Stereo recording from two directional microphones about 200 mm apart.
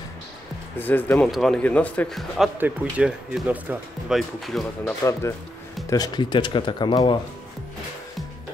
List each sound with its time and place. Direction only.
0.7 s speech: 10° left (ahead or behind)
5.9 s speech: 20° left (ahead or behind)